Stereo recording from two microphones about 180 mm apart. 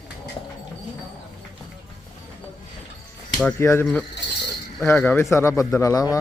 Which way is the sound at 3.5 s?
15° left (ahead or behind).